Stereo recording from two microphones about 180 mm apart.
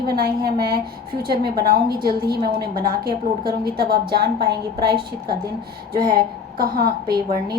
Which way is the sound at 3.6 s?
60° right (ahead or behind).